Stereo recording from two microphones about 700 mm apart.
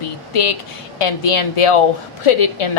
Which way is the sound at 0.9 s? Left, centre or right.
Left.